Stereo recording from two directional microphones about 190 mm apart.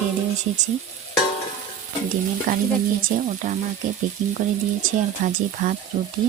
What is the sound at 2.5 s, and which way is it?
Speech, 45° right (ahead or behind).